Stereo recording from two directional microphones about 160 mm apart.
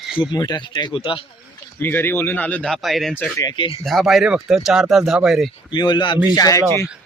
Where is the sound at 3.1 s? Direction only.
10° left (ahead or behind).